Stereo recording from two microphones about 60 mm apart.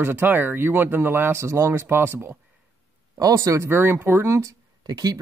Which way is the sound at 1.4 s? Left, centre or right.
Right.